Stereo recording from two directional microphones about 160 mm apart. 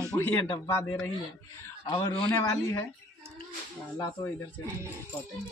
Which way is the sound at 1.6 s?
25° left (ahead or behind).